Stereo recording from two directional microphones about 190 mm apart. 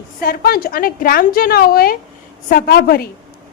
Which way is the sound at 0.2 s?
55° left (ahead or behind).